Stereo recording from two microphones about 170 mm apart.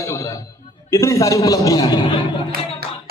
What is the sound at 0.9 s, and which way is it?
A man's voice, 15° left (ahead or behind).